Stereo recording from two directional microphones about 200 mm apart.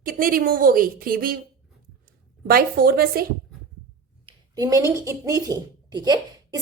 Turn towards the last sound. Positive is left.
turn(degrees=-20)  # may be behind; listen again after turning